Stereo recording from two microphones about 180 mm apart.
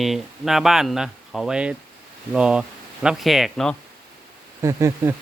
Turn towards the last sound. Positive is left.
turn(degrees=-15)  # may be behind; listen again after turning